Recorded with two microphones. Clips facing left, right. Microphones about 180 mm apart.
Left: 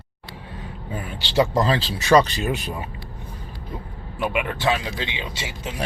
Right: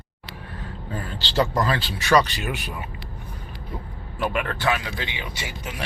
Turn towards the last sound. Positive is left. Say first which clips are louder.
# left 3 dB
turn(degrees=25)  # may be behind; listen again after turning